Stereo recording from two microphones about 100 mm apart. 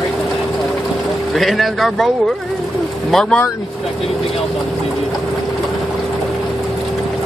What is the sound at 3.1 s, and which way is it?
Speech, 5° left (ahead or behind).